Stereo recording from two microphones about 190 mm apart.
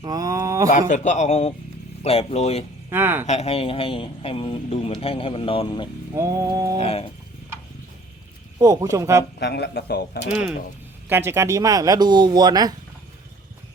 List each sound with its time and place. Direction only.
0.0 s speech: 20° right (ahead or behind)
0.7 s a man's voice: 40° left (ahead or behind)
2.9 s speech: 10° right (ahead or behind)
3.2 s speech: 35° left (ahead or behind)
6.1 s speech: 15° right (ahead or behind)
6.7 s a man's voice: 30° left (ahead or behind)
8.5 s speech: 20° right (ahead or behind)
9.4 s speech: 60° left (ahead or behind)
11.1 s speech: 10° right (ahead or behind)